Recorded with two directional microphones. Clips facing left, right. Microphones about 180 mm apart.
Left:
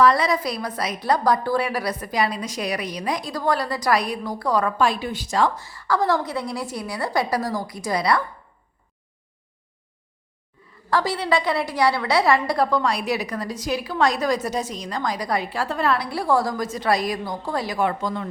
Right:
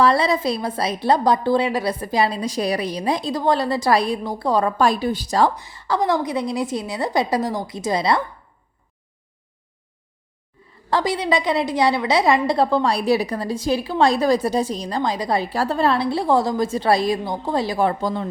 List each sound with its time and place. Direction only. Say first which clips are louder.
0.0 s a woman's voice: right 1 dB; 30° right (ahead or behind)
4.8 s a woman's voice: right 3 dB; 40° right (ahead or behind)
5.5 s a woman's voice: right 1 dB; 20° right (ahead or behind)
10.8 s a woman's voice: right 2 dB; 20° right (ahead or behind)